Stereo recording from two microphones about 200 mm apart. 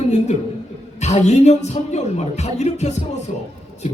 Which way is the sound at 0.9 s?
35° left (ahead or behind).